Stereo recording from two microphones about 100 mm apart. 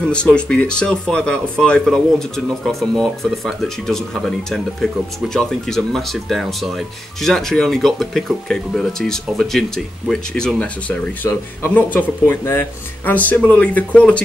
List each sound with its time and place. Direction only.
0.1 s speech: 10° left (ahead or behind)
11.2 s speech: 20° left (ahead or behind)